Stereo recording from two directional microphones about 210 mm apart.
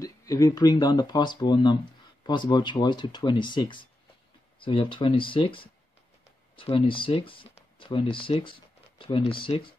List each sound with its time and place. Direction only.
0.0 s speech: 15° left (ahead or behind)